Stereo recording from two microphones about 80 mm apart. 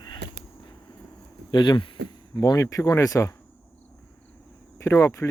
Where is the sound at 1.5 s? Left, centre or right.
Left.